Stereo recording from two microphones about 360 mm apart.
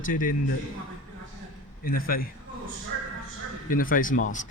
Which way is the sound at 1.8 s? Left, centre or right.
Left.